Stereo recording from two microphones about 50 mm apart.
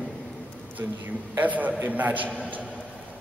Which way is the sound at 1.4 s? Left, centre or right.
Right.